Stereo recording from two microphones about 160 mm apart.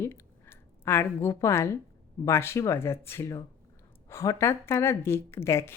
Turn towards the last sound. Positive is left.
turn(degrees=15)  # may be behind; listen again after turning